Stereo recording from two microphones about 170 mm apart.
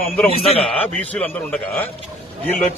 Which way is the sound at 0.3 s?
35° left (ahead or behind).